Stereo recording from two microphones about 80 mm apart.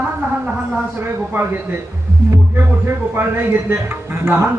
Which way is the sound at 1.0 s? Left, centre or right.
Right.